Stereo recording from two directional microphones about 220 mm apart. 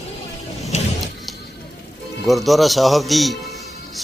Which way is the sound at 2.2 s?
Centre (ahead or behind).